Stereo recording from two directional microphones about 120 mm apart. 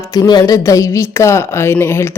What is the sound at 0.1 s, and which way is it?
A woman's voice, 35° left (ahead or behind).